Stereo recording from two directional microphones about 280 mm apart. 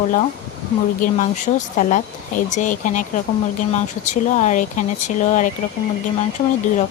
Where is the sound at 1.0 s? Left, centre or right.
Left.